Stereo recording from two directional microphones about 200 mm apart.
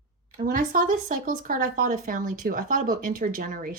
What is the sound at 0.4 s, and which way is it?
Speech, 40° right (ahead or behind).